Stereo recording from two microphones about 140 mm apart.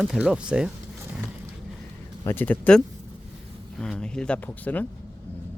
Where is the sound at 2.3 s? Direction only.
15° left (ahead or behind).